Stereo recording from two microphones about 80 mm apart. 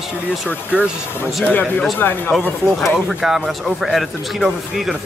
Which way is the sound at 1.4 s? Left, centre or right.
Left.